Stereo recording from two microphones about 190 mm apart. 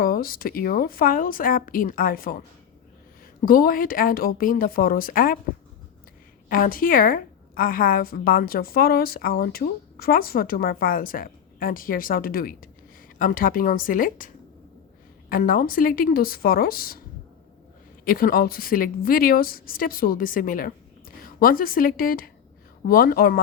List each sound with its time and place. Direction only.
0.0 s a woman's voice: 50° left (ahead or behind)
3.4 s a woman's voice: 50° left (ahead or behind)
6.5 s a woman's voice: 50° left (ahead or behind)
15.3 s a woman's voice: 45° left (ahead or behind)
18.0 s a woman's voice: 50° left (ahead or behind)